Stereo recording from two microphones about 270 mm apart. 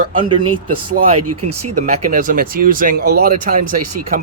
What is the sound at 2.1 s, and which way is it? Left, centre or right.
Speech, right.